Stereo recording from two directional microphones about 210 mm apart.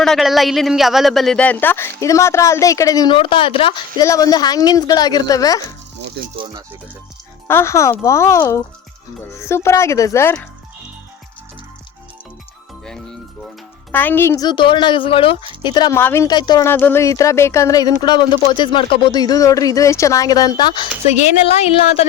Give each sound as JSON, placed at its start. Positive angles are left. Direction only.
{"t": 0.0, "sound": "speech", "side_deg": 0}
{"t": 7.4, "sound": "speech", "side_deg": 10}
{"t": 12.8, "sound": "a woman's voice", "side_deg": 5}
{"t": 21.1, "sound": "a woman's voice", "side_deg": 30}